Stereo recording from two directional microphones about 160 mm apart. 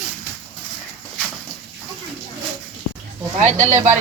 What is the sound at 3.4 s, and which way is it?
Speech, 50° right (ahead or behind).